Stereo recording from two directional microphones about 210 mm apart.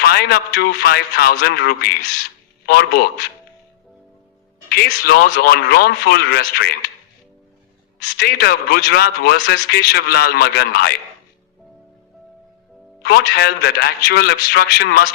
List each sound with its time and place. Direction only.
0.0 s a man's voice: 50° left (ahead or behind)
4.7 s a man's voice: 50° left (ahead or behind)
8.2 s a man's voice: 50° left (ahead or behind)
13.0 s a man's voice: 50° left (ahead or behind)